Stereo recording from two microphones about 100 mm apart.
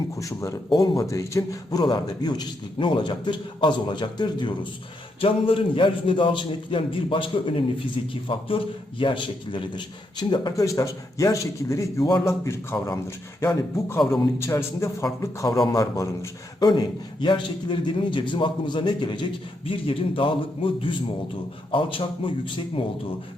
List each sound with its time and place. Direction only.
0.2 s a man's voice: 30° left (ahead or behind); by 4.5 s 50° left (ahead or behind)
5.2 s a man's voice: 65° left (ahead or behind); by 10.5 s 50° left (ahead or behind)
10.5 s a man's voice: 35° left (ahead or behind)
16.6 s a man's voice: 45° left (ahead or behind)